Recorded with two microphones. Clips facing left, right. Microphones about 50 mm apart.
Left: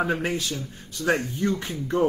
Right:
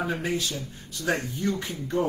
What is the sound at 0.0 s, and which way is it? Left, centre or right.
Speech, left.